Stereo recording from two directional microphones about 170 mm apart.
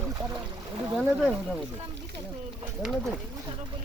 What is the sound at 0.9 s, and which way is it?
Speech, 5° right (ahead or behind).